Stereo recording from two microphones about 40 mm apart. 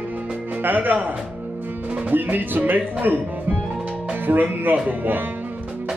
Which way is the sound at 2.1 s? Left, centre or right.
Right.